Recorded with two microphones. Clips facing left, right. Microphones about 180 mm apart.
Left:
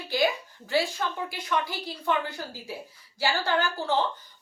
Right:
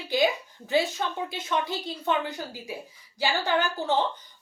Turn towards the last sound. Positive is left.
turn(degrees=-20)  # may be behind; listen again after turning